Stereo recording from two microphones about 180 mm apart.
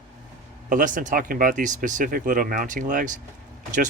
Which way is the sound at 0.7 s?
45° right (ahead or behind).